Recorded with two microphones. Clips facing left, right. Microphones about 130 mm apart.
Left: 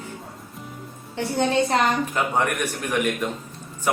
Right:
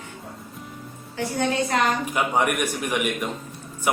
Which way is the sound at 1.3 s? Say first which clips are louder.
Left 2 dB; 30° left (ahead or behind).